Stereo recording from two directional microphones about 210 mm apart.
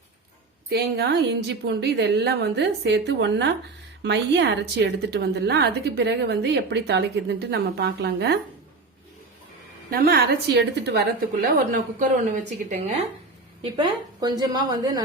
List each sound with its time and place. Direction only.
0.7 s a woman's voice: 50° right (ahead or behind)
9.9 s a woman's voice: 45° right (ahead or behind)
13.6 s a woman's voice: 20° right (ahead or behind)